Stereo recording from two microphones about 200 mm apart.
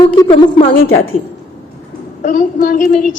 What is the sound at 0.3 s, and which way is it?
Speech, 25° left (ahead or behind).